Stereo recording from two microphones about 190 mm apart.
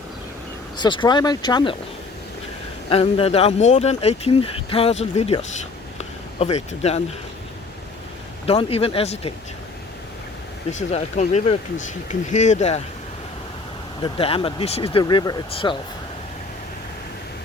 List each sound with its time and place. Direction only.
0.8 s speech: 25° left (ahead or behind)
2.9 s speech: 30° left (ahead or behind)
6.0 s a sound: 35° left (ahead or behind)
8.4 s speech: 30° left (ahead or behind)
10.7 s speech: 40° left (ahead or behind)
14.0 s speech: 30° left (ahead or behind)